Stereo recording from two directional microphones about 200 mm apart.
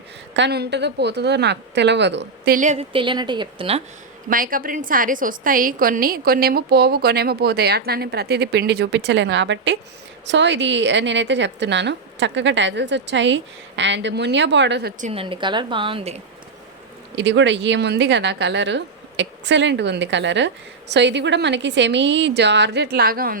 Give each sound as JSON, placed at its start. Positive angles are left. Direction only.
{"t": 0.3, "sound": "a woman's voice", "side_deg": -60}
{"t": 2.6, "sound": "a woman's voice", "side_deg": -35}
{"t": 4.3, "sound": "a woman's voice", "side_deg": -45}
{"t": 15.0, "sound": "a woman's voice", "side_deg": -30}
{"t": 17.2, "sound": "a woman's voice", "side_deg": -65}